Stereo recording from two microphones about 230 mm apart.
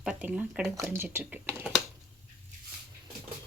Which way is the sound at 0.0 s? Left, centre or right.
Centre.